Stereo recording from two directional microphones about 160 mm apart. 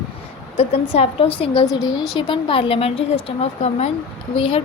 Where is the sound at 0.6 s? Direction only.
40° left (ahead or behind).